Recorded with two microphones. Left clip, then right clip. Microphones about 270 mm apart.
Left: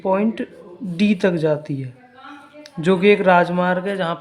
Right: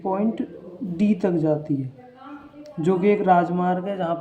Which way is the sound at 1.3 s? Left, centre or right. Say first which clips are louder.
Left 2 dB; left.